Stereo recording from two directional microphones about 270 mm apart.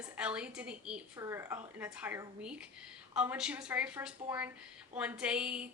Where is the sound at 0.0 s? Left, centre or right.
Centre.